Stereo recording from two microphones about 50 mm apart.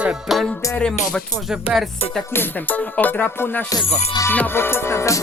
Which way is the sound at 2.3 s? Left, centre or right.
Left.